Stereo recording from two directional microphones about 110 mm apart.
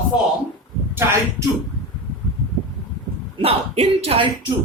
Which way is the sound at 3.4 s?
60° right (ahead or behind).